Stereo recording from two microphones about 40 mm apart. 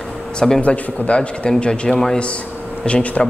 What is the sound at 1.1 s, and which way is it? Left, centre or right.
A man's voice, left.